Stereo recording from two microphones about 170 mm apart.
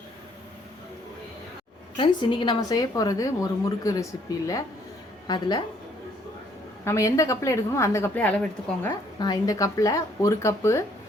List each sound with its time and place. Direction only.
2.0 s a woman's voice: 30° left (ahead or behind)
6.8 s a woman's voice: 20° left (ahead or behind)
9.1 s a woman's voice: 25° left (ahead or behind)